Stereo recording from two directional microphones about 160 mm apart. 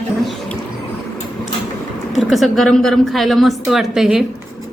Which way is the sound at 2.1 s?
Centre (ahead or behind).